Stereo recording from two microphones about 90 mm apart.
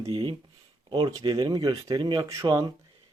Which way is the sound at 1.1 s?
45° right (ahead or behind).